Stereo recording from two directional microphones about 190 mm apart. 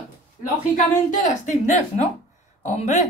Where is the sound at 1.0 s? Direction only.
40° left (ahead or behind).